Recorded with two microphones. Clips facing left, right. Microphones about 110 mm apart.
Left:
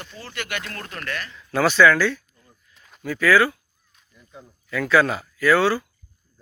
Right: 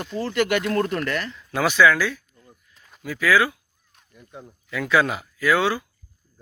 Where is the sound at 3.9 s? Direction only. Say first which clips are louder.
Right 4 dB; 55° right (ahead or behind).